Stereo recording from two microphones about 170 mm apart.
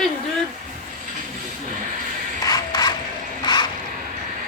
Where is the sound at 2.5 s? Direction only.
20° left (ahead or behind).